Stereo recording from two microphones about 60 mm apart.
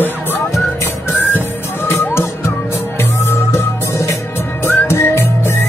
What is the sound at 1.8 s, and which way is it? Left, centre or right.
Music, left.